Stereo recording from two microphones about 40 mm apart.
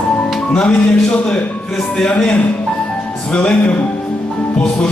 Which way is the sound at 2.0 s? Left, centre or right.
Left.